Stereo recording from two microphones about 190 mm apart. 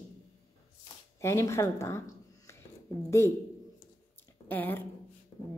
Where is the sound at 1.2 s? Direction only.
15° left (ahead or behind).